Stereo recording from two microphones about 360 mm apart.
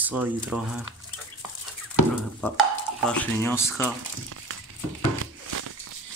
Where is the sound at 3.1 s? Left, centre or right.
Centre.